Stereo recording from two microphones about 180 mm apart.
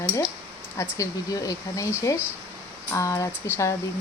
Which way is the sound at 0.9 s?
20° left (ahead or behind).